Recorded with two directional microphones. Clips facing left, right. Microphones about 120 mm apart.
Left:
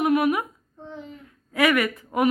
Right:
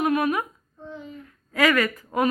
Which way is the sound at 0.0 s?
20° left (ahead or behind).